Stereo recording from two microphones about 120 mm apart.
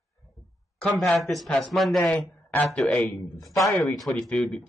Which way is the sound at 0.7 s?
5° left (ahead or behind).